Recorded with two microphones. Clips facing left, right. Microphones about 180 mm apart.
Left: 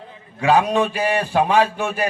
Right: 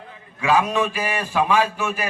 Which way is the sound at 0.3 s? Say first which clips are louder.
Left 3 dB; 35° left (ahead or behind).